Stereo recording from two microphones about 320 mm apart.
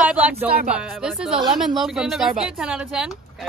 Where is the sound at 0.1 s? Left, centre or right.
Centre.